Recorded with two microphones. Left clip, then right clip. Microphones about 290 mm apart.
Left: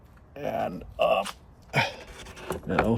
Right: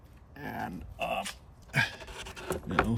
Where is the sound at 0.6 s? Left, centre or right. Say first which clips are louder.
Left 10 dB; centre.